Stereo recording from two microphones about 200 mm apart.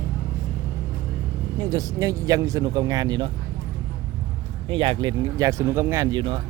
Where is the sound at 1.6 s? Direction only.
20° right (ahead or behind).